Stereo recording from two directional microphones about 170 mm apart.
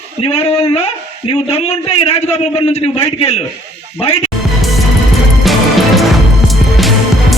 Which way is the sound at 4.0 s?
35° left (ahead or behind).